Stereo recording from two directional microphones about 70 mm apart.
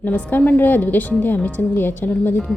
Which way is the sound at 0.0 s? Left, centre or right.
Left.